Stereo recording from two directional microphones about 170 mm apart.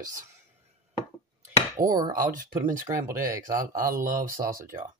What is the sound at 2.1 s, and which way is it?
Speech, 55° right (ahead or behind).